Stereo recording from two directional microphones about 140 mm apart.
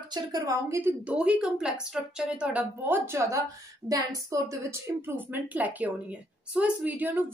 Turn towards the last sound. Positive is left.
turn(degrees=-10)  # may be behind; listen again after turning